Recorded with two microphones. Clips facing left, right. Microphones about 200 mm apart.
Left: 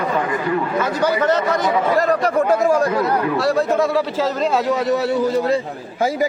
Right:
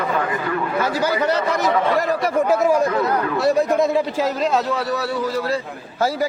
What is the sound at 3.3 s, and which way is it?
A man's voice, 20° right (ahead or behind).